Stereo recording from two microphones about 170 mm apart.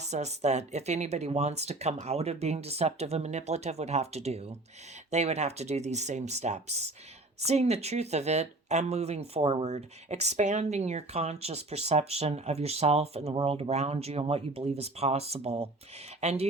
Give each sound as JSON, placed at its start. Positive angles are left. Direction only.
{"t": 0.0, "sound": "speech", "side_deg": -40}